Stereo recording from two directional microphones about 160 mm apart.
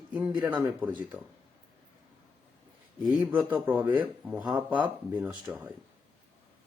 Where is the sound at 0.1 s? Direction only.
10° right (ahead or behind).